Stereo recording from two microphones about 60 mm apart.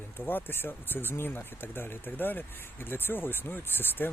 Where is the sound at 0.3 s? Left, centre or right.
Left.